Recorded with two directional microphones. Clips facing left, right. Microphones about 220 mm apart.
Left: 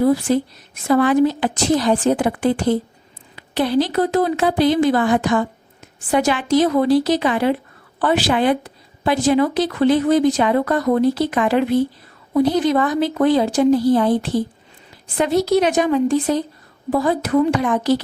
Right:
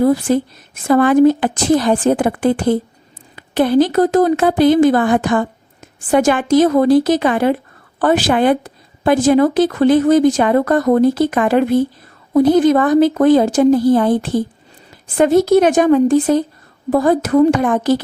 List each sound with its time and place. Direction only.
0.0 s a woman's voice: 50° right (ahead or behind)